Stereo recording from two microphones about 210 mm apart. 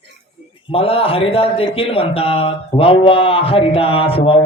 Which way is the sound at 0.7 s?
25° left (ahead or behind).